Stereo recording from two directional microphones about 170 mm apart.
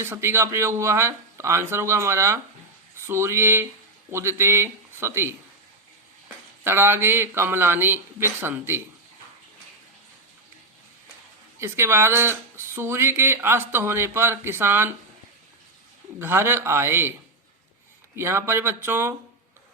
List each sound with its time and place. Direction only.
0.0 s speech: 15° right (ahead or behind)
11.6 s speech: 15° right (ahead or behind)
16.1 s speech: 15° right (ahead or behind)
18.2 s speech: 15° right (ahead or behind)